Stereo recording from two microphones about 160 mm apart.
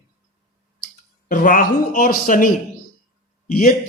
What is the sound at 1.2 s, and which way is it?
Speech, 60° left (ahead or behind).